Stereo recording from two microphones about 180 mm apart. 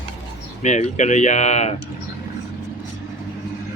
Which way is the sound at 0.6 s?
40° left (ahead or behind).